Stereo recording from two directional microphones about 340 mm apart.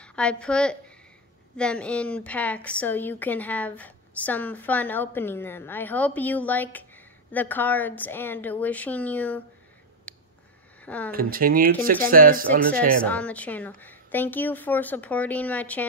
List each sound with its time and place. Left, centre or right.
0.0 s a woman's voice: centre
10.1 s a sound: centre
11.1 s speech: right
12.4 s a woman's voice: centre